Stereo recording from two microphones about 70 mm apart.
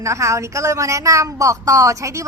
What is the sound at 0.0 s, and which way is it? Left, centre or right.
A woman's voice, right.